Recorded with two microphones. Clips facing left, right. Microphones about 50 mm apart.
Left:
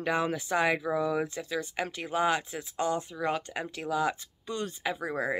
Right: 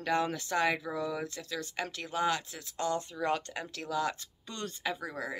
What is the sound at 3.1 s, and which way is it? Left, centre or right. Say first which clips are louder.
Speech: left 1 dB; centre.